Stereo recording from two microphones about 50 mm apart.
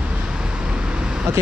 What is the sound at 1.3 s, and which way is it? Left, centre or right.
Speech, right.